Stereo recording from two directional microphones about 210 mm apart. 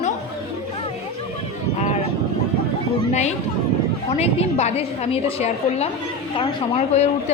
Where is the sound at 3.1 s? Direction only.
35° left (ahead or behind).